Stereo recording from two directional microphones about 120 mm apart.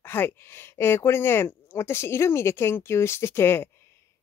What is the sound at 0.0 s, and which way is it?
Speech, 20° left (ahead or behind).